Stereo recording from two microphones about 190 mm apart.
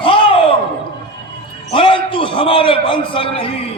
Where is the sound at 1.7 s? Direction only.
25° left (ahead or behind).